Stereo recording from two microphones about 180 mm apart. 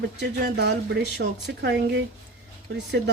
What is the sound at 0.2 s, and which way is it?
Speech, 65° right (ahead or behind).